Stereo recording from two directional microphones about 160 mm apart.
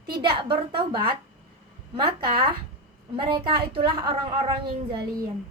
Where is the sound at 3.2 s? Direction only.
30° right (ahead or behind).